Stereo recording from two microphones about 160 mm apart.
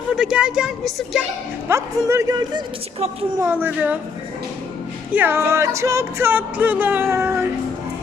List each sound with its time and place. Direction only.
0.2 s a woman's voice: 5° right (ahead or behind)
1.6 s speech: 15° right (ahead or behind)
3.4 s music: 10° right (ahead or behind)
5.1 s music: 15° right (ahead or behind)